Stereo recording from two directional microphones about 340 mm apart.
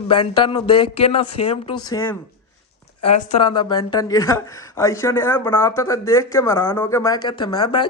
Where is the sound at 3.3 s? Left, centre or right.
Centre.